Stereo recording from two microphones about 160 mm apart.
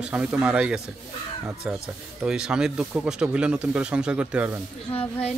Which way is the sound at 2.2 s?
5° right (ahead or behind).